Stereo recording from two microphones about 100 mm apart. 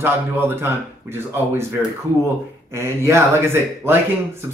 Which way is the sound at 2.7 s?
30° right (ahead or behind).